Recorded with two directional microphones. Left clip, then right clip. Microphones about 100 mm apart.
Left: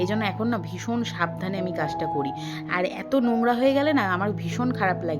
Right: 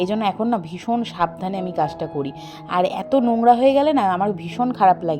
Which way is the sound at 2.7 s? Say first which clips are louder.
Right 7 dB; 35° right (ahead or behind).